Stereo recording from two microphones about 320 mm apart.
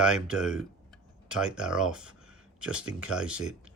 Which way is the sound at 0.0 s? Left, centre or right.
Centre.